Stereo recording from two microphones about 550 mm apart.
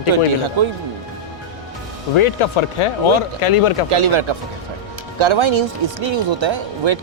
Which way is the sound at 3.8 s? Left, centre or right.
Right.